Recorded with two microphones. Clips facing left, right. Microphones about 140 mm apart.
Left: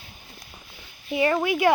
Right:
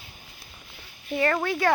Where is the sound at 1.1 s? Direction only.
15° left (ahead or behind).